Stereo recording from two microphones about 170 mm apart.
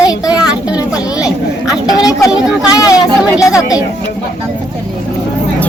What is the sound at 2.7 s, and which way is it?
Speech, 20° left (ahead or behind).